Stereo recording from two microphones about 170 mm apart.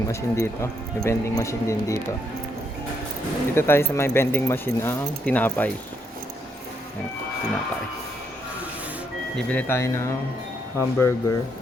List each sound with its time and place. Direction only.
0.1 s speech: 15° left (ahead or behind)
3.5 s speech: 15° left (ahead or behind)
9.3 s speech: 10° left (ahead or behind)